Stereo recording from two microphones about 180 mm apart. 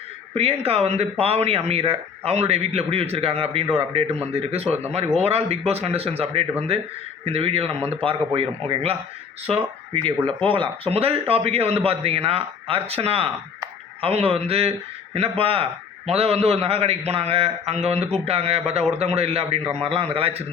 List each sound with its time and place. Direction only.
0.6 s speech: 35° right (ahead or behind)